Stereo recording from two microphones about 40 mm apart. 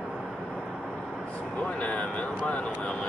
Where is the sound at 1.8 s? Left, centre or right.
Left.